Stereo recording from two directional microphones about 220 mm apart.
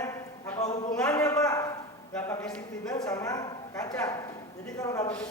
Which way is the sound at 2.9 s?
15° left (ahead or behind).